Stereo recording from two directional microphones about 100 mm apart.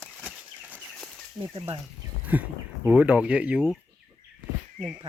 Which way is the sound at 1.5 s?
75° right (ahead or behind).